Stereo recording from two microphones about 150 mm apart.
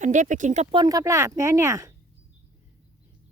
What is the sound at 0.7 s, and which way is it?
Speech, 30° right (ahead or behind).